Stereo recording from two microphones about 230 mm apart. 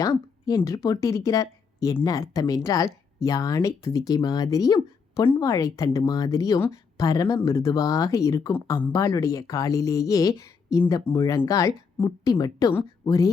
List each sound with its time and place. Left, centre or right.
0.0 s speech: centre